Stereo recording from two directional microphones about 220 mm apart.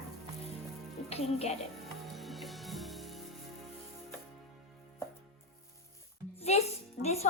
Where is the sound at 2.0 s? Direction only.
Centre (ahead or behind).